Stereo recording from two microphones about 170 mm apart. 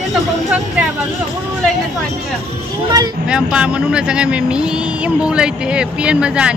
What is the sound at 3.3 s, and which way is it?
Speech, 5° right (ahead or behind).